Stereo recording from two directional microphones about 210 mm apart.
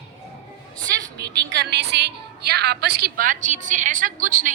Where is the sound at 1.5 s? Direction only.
55° right (ahead or behind).